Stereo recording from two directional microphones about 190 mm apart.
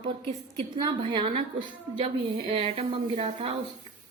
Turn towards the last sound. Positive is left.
turn(degrees=-30)  # may be behind; listen again after turning